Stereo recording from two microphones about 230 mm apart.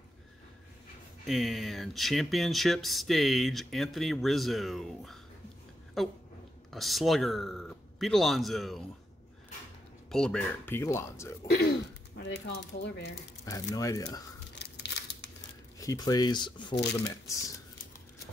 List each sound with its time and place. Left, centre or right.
1.2 s speech: centre
6.0 s a sound: centre
6.7 s speech: centre
10.1 s speech: centre
11.5 s speech: left
13.5 s speech: centre
14.8 s scissors: left
15.8 s speech: centre